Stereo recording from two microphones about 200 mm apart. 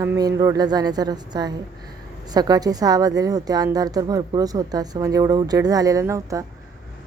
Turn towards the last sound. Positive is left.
turn(degrees=-15)  # may be behind; listen again after turning